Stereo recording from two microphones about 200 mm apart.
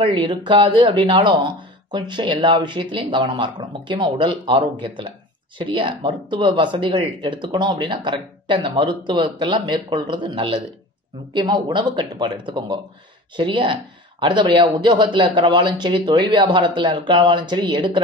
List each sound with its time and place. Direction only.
0.0 s speech: 25° right (ahead or behind)